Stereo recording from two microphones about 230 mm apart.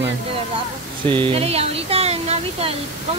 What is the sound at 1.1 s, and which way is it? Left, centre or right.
Speech, right.